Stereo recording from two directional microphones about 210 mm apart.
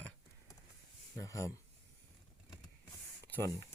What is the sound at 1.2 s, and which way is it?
Speech, 15° left (ahead or behind).